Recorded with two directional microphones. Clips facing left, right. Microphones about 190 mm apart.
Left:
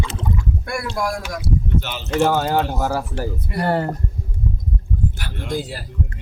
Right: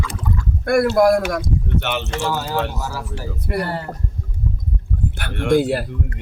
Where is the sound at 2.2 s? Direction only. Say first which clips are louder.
Left 7 dB; 60° left (ahead or behind).